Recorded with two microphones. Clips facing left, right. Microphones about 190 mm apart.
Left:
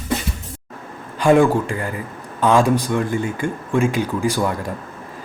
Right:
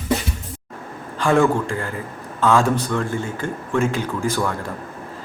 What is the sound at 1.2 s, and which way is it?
Speech, 15° left (ahead or behind).